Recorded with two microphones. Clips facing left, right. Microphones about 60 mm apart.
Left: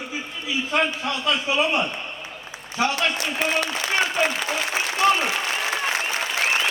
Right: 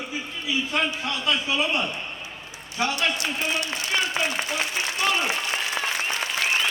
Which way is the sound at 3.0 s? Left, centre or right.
Left.